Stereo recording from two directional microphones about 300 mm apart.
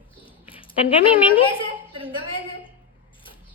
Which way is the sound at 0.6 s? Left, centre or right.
Centre.